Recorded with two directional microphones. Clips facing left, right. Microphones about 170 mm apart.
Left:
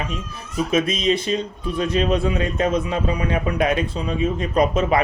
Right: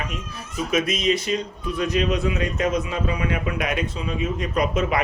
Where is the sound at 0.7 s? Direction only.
30° left (ahead or behind).